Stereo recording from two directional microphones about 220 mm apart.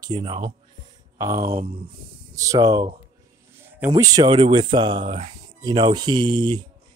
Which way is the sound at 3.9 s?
20° right (ahead or behind).